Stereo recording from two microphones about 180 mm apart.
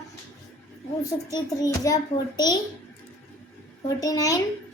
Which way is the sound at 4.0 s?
20° left (ahead or behind).